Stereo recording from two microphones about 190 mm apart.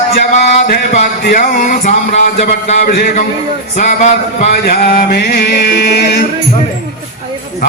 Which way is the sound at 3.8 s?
40° left (ahead or behind).